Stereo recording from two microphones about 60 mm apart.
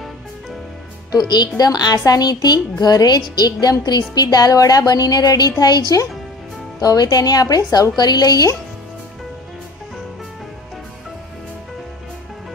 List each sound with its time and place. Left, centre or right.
1.1 s a woman's voice: left